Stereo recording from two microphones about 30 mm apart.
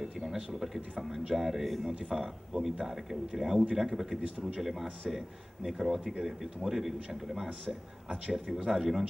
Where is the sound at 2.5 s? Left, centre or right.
Right.